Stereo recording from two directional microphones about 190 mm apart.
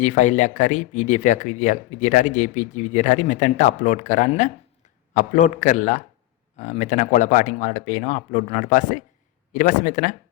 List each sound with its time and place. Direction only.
0.0 s speech: 40° left (ahead or behind)